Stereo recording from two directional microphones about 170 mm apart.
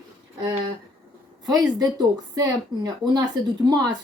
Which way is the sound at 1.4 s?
25° right (ahead or behind).